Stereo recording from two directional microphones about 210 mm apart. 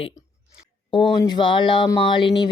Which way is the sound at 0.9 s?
25° left (ahead or behind).